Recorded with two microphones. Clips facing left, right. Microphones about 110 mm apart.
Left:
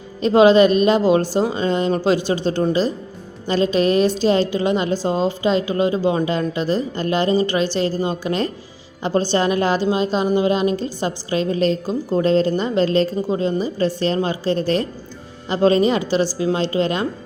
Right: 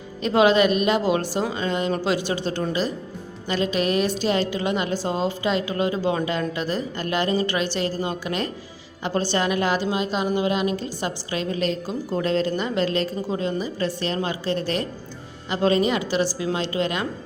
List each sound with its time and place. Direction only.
0.2 s a woman's voice: 30° left (ahead or behind)